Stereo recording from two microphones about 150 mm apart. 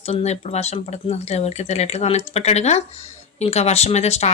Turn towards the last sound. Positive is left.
turn(degrees=45)  # may be behind; listen again after turning